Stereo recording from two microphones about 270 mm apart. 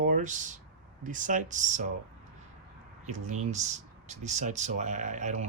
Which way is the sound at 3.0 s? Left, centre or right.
Right.